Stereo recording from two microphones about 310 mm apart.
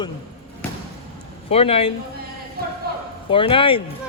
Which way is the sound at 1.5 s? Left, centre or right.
Centre.